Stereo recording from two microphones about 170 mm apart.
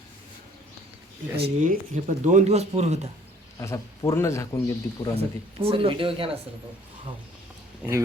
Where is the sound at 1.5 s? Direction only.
50° right (ahead or behind).